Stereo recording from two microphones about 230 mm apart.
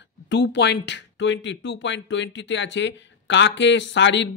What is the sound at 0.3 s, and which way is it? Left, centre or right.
Speech, left.